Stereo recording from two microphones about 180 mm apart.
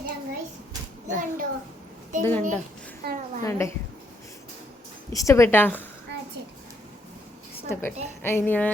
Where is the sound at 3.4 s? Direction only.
15° left (ahead or behind).